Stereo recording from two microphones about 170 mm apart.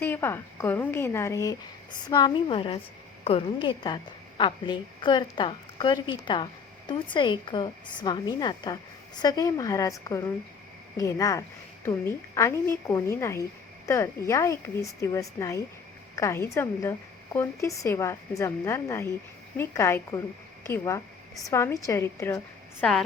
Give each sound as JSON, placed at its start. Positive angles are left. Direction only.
{"t": 0.0, "sound": "a woman's voice", "side_deg": 15}
{"t": 22.8, "sound": "a woman's voice", "side_deg": 5}